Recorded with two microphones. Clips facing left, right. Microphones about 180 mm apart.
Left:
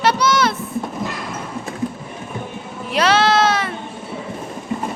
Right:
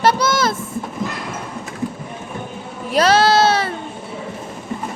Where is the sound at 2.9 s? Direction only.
40° right (ahead or behind).